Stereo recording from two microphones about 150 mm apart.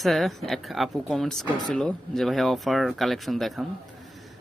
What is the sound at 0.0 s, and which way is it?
Speech, centre (ahead or behind).